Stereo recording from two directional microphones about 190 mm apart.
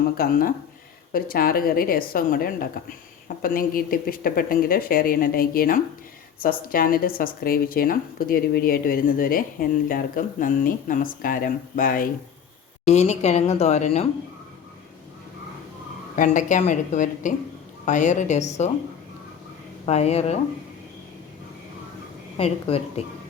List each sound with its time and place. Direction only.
0.2 s speech: 50° left (ahead or behind)
12.8 s speech: 35° left (ahead or behind)
16.1 s speech: 40° left (ahead or behind)
19.8 s speech: 35° left (ahead or behind)
22.4 s speech: 30° left (ahead or behind)